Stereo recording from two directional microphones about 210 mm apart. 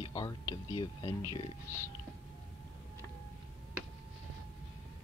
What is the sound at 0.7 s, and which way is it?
Speech, 20° left (ahead or behind).